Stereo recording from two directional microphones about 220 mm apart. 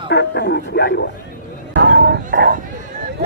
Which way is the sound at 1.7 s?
50° right (ahead or behind).